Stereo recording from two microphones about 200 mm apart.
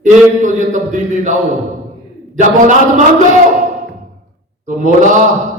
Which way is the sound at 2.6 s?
40° right (ahead or behind).